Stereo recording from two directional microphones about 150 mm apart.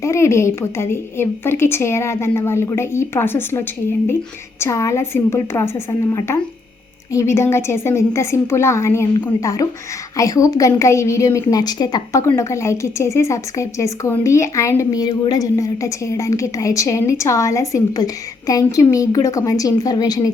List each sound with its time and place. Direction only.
0.0 s a woman's voice: 20° left (ahead or behind)